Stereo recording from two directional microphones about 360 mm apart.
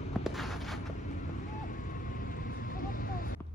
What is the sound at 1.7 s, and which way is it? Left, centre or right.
Vehicle, left.